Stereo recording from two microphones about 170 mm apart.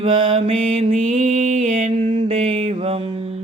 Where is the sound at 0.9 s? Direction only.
45° right (ahead or behind).